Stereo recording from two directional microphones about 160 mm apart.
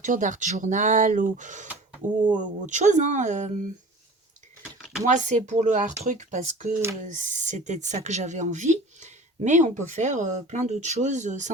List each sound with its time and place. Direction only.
0.0 s speech: 50° right (ahead or behind)
4.6 s a sound: centre (ahead or behind)
5.0 s speech: 50° right (ahead or behind)